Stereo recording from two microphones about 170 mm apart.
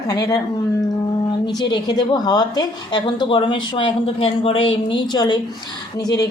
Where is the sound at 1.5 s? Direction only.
25° left (ahead or behind).